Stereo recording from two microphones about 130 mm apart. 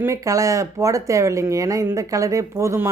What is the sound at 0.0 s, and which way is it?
Speech, 25° right (ahead or behind).